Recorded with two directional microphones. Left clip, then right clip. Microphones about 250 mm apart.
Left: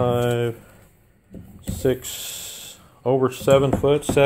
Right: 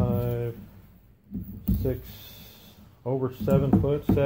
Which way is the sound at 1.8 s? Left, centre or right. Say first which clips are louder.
Left 13 dB; left.